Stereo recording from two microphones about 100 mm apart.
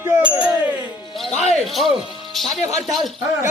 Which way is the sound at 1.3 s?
90° left.